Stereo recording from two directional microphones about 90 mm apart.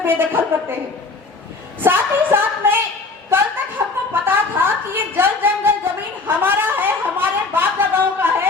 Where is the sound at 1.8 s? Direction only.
25° right (ahead or behind).